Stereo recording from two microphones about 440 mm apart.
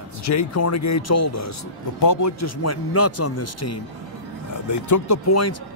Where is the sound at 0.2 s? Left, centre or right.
Left.